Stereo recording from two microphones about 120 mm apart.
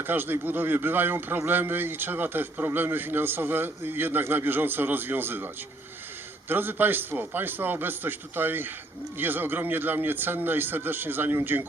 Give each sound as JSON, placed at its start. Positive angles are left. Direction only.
{"t": 0.0, "sound": "speech", "side_deg": -15}
{"t": 6.5, "sound": "speech", "side_deg": -15}